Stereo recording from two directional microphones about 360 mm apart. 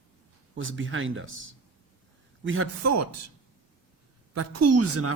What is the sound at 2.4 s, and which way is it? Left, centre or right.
Speech, right.